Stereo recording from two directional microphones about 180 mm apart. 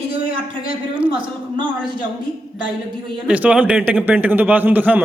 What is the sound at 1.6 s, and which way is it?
Speech, 25° right (ahead or behind).